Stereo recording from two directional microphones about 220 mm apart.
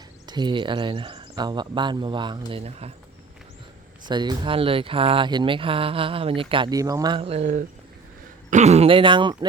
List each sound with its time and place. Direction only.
0.3 s speech: 20° right (ahead or behind)
4.0 s speech: 20° right (ahead or behind)